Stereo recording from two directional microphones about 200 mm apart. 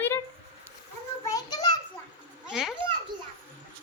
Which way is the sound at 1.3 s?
20° left (ahead or behind).